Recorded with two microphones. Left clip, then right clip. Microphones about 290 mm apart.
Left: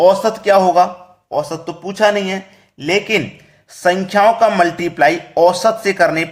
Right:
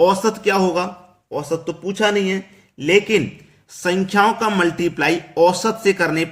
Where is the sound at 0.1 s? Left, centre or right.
Centre.